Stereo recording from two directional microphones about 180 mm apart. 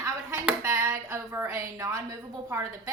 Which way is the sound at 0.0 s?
15° right (ahead or behind).